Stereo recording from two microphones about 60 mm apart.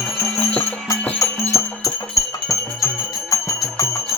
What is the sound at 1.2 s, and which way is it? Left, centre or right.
Music, left.